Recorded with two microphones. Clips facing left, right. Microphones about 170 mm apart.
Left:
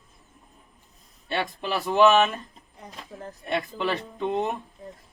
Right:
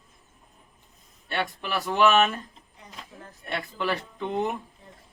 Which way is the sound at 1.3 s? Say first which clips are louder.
Left 2 dB; 25° left (ahead or behind).